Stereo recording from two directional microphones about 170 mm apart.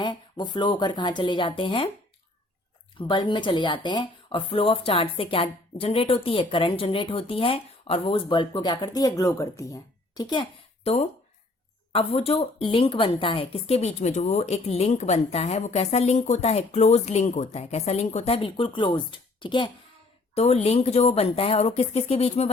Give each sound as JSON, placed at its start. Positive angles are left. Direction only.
{"t": 0.0, "sound": "speech", "side_deg": 25}
{"t": 3.0, "sound": "speech", "side_deg": 30}
{"t": 10.8, "sound": "speech", "side_deg": 40}
{"t": 20.3, "sound": "speech", "side_deg": 40}